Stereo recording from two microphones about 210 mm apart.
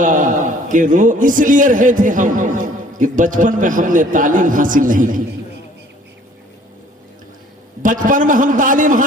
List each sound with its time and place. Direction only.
0.0 s a man's voice: 40° right (ahead or behind)
7.8 s a man's voice: 40° right (ahead or behind)